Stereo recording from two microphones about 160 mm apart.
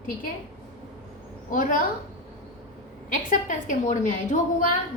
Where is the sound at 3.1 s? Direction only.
55° left (ahead or behind).